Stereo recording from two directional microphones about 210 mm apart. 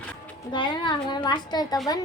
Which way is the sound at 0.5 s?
20° left (ahead or behind).